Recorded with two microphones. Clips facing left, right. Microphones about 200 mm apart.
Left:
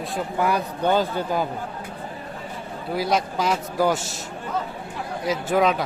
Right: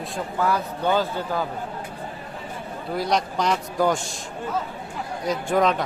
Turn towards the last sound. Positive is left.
turn(degrees=5)  # may be behind; listen again after turning